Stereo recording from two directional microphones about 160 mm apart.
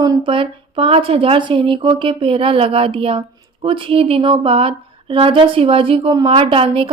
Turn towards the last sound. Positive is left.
turn(degrees=-35)  # may be behind; listen again after turning